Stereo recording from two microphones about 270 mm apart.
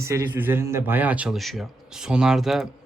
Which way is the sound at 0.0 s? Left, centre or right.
Centre.